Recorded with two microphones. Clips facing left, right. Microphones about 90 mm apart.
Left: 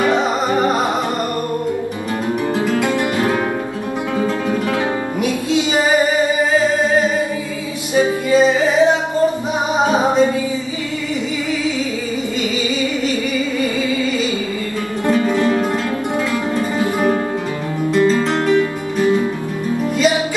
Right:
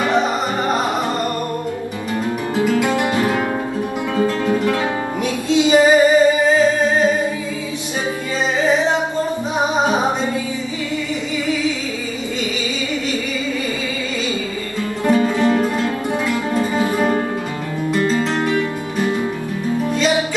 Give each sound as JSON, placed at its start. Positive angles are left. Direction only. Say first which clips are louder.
{"t": 2.8, "sound": "music", "louder": "even", "side_deg": -20}
{"t": 15.0, "sound": "music", "louder": "even", "side_deg": -20}